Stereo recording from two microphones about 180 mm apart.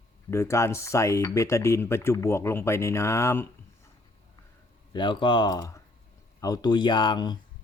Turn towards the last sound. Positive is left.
turn(degrees=25)  # may be behind; listen again after turning